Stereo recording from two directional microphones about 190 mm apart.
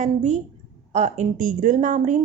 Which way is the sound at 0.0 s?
40° right (ahead or behind).